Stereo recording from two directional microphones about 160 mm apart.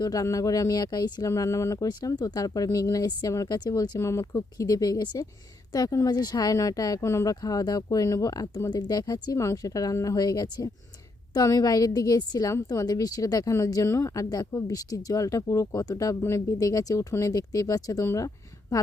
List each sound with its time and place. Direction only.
0.0 s a woman's voice: 20° left (ahead or behind)